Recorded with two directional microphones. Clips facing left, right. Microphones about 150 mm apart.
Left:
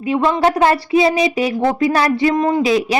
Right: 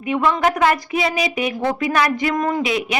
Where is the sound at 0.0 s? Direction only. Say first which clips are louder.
Left 3 dB; 35° left (ahead or behind).